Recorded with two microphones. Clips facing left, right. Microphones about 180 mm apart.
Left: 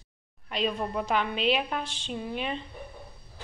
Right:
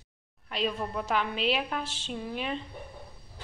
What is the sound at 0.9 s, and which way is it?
A woman's voice, centre (ahead or behind).